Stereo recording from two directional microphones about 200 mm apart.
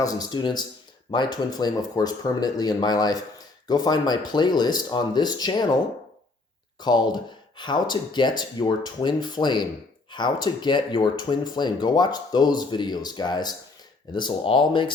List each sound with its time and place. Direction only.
0.0 s speech: 20° left (ahead or behind)